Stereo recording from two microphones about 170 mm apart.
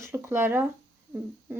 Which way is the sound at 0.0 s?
15° right (ahead or behind).